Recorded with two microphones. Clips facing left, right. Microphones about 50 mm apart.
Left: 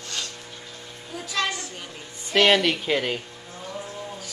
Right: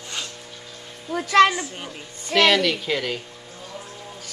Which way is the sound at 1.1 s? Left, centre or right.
Right.